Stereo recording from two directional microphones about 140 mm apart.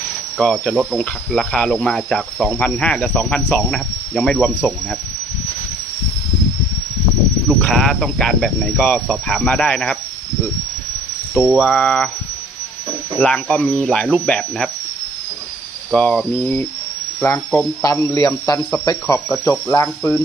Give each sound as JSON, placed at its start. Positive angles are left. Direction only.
{"t": 0.3, "sound": "speech", "side_deg": 5}
{"t": 7.6, "sound": "speech", "side_deg": 5}
{"t": 11.3, "sound": "speech", "side_deg": -5}
{"t": 13.1, "sound": "speech", "side_deg": 5}
{"t": 15.9, "sound": "cricket", "side_deg": 5}
{"t": 17.9, "sound": "speech", "side_deg": 20}
{"t": 19.5, "sound": "cricket", "side_deg": 20}